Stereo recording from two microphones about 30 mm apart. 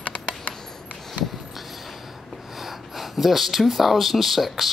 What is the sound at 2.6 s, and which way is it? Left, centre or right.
A man's voice, centre.